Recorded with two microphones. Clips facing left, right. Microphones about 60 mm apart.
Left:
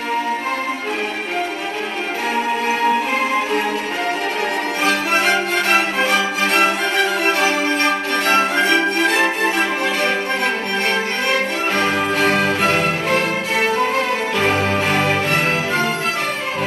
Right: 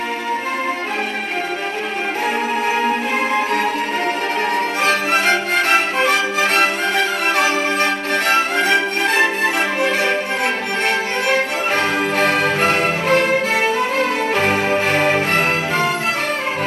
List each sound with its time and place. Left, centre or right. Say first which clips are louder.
4.8 s music: even; right
11.7 s music: even; right
14.3 s music: even; right